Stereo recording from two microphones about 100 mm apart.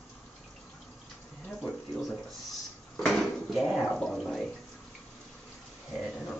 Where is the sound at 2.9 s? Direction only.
Centre (ahead or behind).